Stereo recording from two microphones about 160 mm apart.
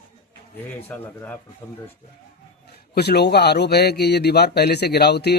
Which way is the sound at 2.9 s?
90° left.